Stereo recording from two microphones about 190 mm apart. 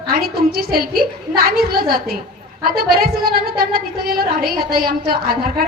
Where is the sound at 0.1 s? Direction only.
55° right (ahead or behind).